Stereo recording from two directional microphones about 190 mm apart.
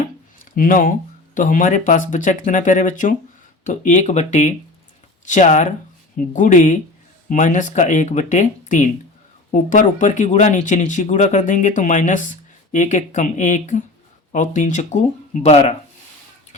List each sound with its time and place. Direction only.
0.5 s speech: 45° left (ahead or behind)